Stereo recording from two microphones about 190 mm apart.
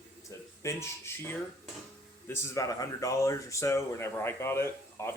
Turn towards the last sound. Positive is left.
turn(degrees=15)  # may be behind; listen again after turning